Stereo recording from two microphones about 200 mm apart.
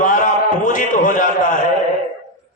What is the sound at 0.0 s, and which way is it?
A man's voice, 40° left (ahead or behind).